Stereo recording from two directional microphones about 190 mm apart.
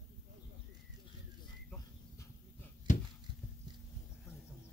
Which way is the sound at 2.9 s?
40° left (ahead or behind).